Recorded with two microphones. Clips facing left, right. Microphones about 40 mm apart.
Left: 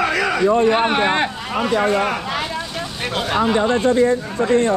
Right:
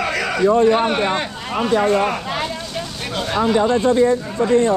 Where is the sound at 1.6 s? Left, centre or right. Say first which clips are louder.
Right 1 dB; centre.